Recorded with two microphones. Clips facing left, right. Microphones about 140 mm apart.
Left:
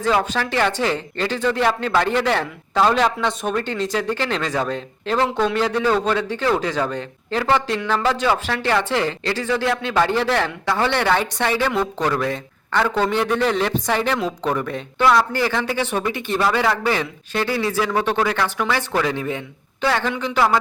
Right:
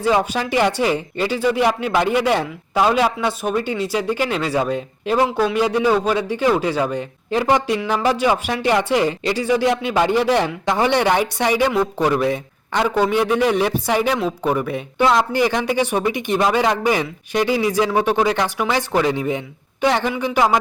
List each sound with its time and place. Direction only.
0.1 s speech: 15° right (ahead or behind)